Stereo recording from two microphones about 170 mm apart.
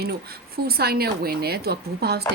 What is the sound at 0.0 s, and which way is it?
Speech, 65° right (ahead or behind).